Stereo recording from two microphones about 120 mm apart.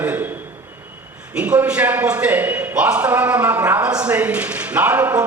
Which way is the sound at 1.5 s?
15° right (ahead or behind).